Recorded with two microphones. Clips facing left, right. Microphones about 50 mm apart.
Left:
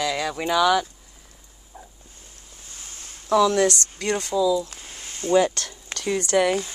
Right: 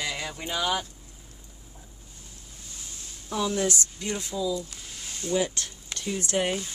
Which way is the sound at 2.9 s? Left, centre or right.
Left.